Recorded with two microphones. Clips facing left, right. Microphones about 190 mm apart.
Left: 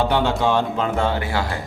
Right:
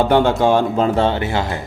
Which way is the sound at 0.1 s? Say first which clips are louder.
Right 5 dB; 50° right (ahead or behind).